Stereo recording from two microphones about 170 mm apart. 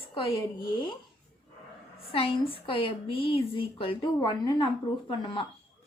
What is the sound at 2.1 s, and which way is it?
A woman's voice, 30° left (ahead or behind).